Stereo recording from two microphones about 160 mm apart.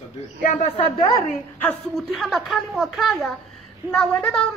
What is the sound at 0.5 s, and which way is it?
Speech, 35° left (ahead or behind).